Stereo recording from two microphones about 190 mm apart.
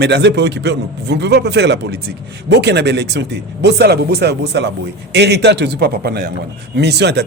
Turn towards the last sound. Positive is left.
turn(degrees=-60)  # may be behind; listen again after turning